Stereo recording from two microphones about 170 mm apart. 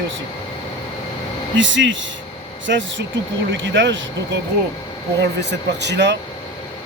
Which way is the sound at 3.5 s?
90° right.